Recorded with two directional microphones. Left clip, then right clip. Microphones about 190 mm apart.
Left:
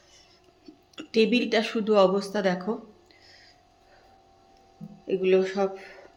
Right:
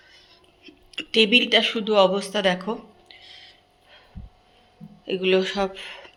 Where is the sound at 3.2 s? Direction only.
10° left (ahead or behind).